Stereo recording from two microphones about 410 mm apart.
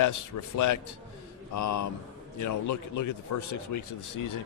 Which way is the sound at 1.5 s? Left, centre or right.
Left.